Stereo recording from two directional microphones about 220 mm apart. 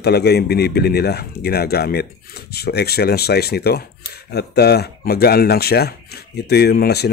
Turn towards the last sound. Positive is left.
turn(degrees=45)  # may be behind; listen again after turning